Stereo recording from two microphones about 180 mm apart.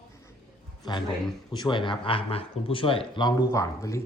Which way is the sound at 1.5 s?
25° left (ahead or behind).